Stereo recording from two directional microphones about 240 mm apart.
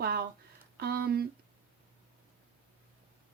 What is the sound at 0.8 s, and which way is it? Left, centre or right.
Speech, right.